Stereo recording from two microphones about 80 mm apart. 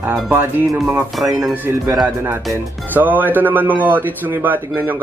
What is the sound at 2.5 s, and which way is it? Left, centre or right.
Speech, centre.